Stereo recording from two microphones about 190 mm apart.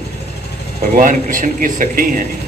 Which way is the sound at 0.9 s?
45° right (ahead or behind).